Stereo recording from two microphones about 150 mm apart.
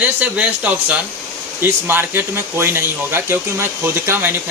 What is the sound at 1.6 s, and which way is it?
Speech, 15° right (ahead or behind).